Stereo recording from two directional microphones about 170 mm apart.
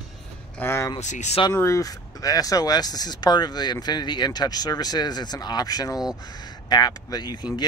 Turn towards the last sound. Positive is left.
turn(degrees=25)  # may be behind; listen again after turning